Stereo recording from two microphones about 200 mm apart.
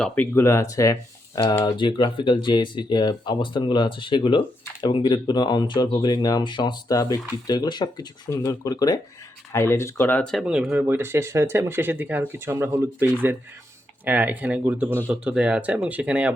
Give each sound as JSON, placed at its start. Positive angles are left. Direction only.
{"t": 0.0, "sound": "speech", "side_deg": 10}